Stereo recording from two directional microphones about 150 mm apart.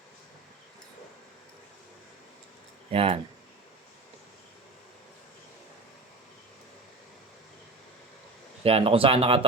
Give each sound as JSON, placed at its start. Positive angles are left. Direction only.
{"t": 2.9, "sound": "speech", "side_deg": -40}
{"t": 8.6, "sound": "speech", "side_deg": -40}